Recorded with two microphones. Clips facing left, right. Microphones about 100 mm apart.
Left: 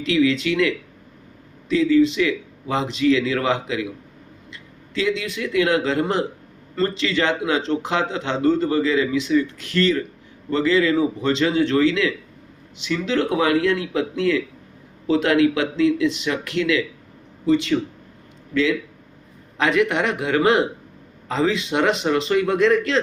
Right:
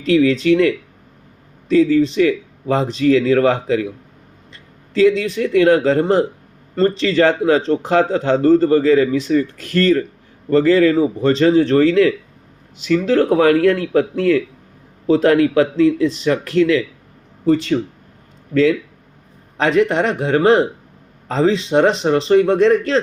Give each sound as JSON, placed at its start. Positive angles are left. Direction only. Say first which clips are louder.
{"t": 0.0, "sound": "a man's voice", "louder": "right 5 dB", "side_deg": -35}